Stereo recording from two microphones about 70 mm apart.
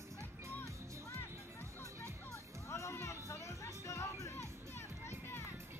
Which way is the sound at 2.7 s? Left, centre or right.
Left.